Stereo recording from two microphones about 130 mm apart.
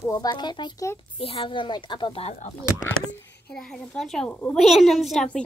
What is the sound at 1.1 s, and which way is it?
Speech, 45° left (ahead or behind).